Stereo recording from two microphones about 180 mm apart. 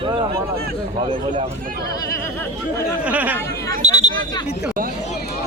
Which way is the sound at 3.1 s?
10° right (ahead or behind).